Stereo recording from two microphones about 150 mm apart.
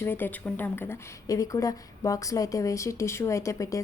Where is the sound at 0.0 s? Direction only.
15° left (ahead or behind).